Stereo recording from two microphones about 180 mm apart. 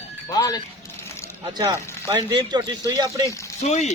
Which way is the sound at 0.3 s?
20° left (ahead or behind).